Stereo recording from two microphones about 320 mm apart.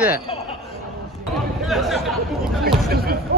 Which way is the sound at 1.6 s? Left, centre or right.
Centre.